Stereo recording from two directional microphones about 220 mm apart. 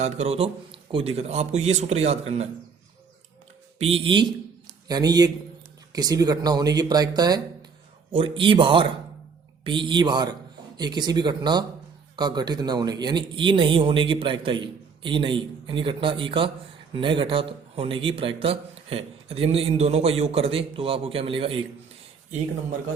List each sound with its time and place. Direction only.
0.0 s speech: 30° right (ahead or behind)
3.8 s speech: 25° right (ahead or behind)